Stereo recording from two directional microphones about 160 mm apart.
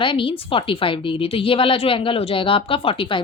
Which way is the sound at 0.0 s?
30° left (ahead or behind).